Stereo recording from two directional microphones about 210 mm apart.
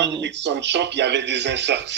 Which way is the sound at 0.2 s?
55° right (ahead or behind).